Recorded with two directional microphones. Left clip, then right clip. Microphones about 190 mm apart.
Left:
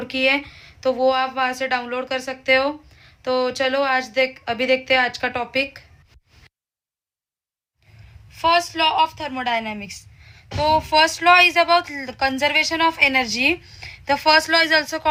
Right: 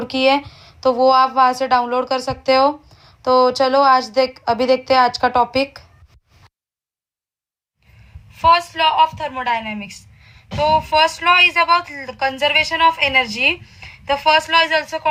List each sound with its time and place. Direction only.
0.0 s speech: 20° right (ahead or behind)
8.4 s a woman's voice: 25° left (ahead or behind); by 15.0 s 45° left (ahead or behind)